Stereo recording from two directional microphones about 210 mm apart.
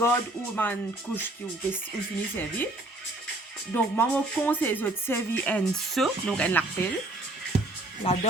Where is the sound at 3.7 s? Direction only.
10° left (ahead or behind).